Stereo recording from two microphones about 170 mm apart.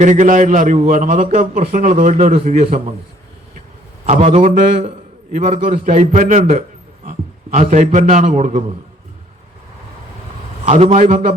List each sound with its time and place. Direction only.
0.0 s a man's voice: 45° right (ahead or behind)
4.0 s a man's voice: 40° right (ahead or behind)
10.7 s a man's voice: 40° right (ahead or behind)